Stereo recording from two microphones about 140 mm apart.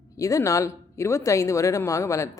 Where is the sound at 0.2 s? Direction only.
25° left (ahead or behind).